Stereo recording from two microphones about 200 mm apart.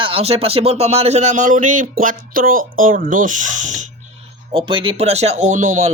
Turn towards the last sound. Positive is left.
turn(degrees=-35)  # may be behind; listen again after turning